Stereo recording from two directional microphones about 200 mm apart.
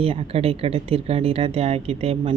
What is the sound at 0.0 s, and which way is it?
Speech, 30° right (ahead or behind).